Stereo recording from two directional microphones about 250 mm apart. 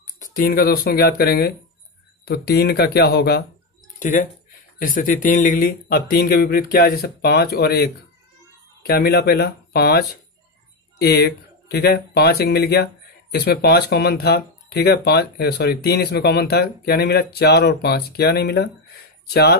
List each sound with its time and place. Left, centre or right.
0.2 s speech: left